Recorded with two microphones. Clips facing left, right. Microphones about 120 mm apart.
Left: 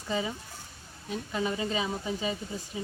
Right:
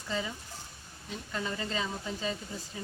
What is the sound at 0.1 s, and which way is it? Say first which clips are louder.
Speech: left 4 dB; 15° left (ahead or behind).